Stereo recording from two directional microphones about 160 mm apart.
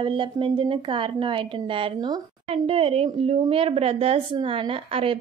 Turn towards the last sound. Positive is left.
turn(degrees=-35)  # may be behind; listen again after turning